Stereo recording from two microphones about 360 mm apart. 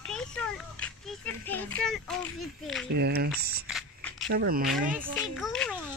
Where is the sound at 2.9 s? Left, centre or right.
Right.